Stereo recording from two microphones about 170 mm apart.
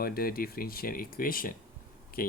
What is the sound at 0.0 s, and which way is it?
Speech, 60° left (ahead or behind).